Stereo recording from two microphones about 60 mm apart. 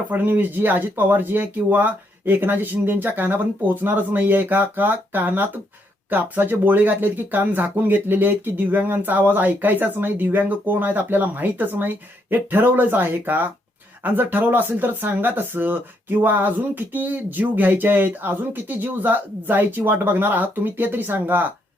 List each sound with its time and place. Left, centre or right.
0.1 s speech: right